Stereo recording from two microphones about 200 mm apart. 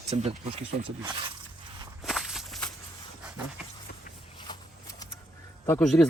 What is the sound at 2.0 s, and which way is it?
Walk, centre (ahead or behind).